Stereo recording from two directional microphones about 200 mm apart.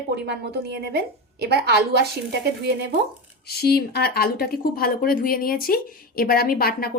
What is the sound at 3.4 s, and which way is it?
Speech, 50° left (ahead or behind).